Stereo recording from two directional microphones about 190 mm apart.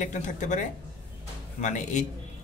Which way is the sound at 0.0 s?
40° left (ahead or behind).